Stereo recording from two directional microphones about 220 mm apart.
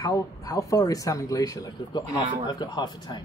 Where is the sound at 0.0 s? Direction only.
15° left (ahead or behind).